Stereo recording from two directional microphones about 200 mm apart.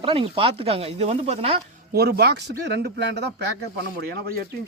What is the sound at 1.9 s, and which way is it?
A man's voice, 50° right (ahead or behind).